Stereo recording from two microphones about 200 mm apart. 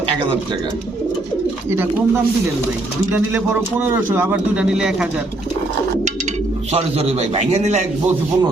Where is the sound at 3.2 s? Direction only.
10° right (ahead or behind).